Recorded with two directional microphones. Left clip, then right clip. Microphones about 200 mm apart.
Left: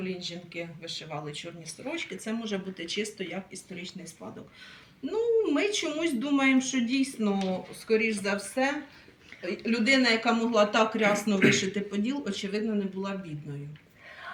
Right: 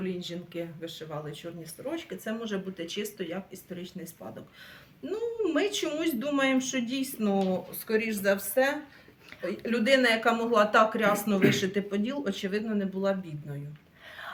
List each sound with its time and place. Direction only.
0.2 s speech: 30° right (ahead or behind)
2.2 s speech: 25° right (ahead or behind)
5.1 s speech: 35° right (ahead or behind)